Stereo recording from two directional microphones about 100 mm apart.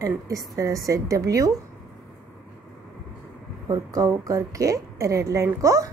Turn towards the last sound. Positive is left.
turn(degrees=-30)  # may be behind; listen again after turning